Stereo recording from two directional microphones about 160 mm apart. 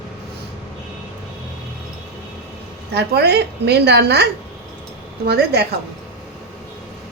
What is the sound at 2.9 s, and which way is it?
A woman's voice, 90° right.